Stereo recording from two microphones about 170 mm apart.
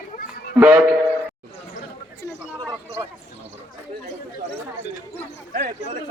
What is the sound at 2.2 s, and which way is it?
Chatter, 20° left (ahead or behind).